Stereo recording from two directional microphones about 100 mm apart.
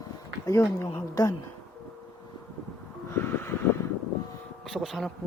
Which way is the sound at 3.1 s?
25° left (ahead or behind).